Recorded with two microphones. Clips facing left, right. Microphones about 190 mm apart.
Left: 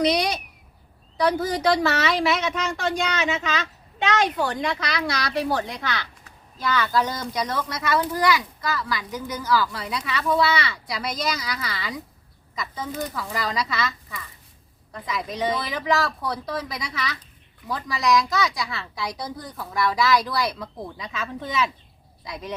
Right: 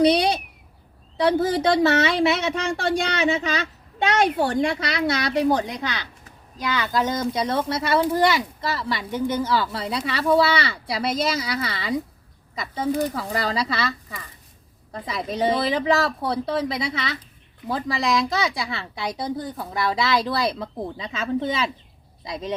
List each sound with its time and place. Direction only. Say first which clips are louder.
0.0 s a woman's voice: right 4 dB; 30° right (ahead or behind)